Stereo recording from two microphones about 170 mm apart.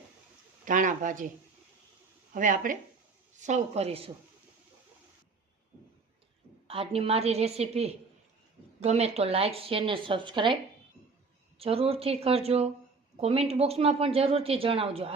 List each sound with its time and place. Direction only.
0.6 s speech: 50° right (ahead or behind)
2.3 s speech: 50° right (ahead or behind); by 4.1 s 35° right (ahead or behind)
6.7 s speech: 35° right (ahead or behind)
11.6 s speech: 35° right (ahead or behind)